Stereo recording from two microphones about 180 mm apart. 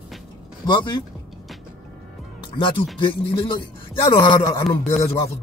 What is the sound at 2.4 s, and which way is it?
Music, 25° left (ahead or behind).